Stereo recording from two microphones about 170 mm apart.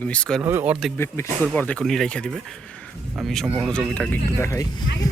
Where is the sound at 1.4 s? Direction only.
10° left (ahead or behind).